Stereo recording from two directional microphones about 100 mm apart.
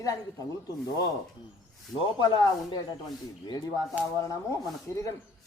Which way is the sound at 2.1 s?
45° left (ahead or behind).